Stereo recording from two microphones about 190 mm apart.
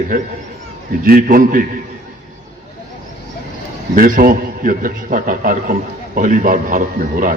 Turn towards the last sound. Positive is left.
turn(degrees=-45)  # may be behind; listen again after turning